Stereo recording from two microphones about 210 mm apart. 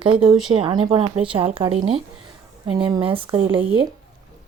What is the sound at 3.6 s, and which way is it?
Speech, 5° right (ahead or behind).